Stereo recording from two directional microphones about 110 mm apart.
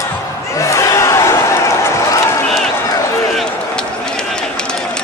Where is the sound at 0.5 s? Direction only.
25° left (ahead or behind).